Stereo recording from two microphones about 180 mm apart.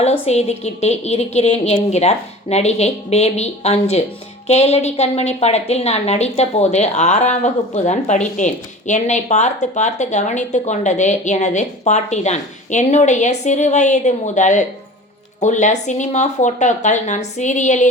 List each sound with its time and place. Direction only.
0.0 s a woman's voice: 35° left (ahead or behind)